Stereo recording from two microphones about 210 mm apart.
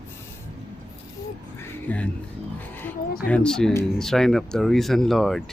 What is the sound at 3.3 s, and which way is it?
Speech, 5° left (ahead or behind).